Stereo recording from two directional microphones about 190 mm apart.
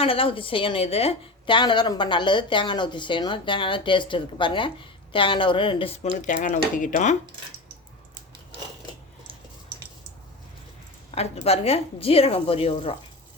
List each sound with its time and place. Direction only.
0.0 s a woman's voice: 30° left (ahead or behind)
11.1 s a woman's voice: 35° left (ahead or behind)